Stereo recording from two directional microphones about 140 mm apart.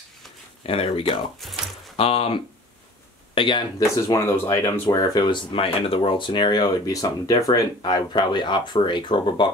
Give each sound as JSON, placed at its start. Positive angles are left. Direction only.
{"t": 0.7, "sound": "speech", "side_deg": 40}
{"t": 1.4, "sound": "a sound", "side_deg": 0}
{"t": 2.0, "sound": "speech", "side_deg": 45}
{"t": 3.9, "sound": "speech", "side_deg": 25}